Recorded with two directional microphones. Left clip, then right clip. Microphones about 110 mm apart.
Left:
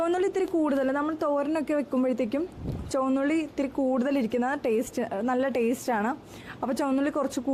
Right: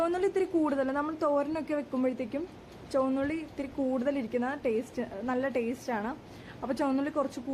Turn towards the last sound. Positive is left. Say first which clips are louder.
# left 4 dB
turn(degrees=35)  # may be behind; listen again after turning